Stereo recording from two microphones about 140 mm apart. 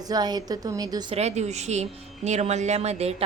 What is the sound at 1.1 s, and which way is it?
A woman's voice, 50° right (ahead or behind).